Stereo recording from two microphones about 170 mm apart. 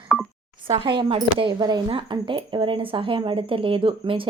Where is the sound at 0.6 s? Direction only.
30° right (ahead or behind).